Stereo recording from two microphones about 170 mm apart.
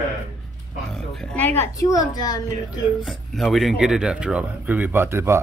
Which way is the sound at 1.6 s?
20° left (ahead or behind).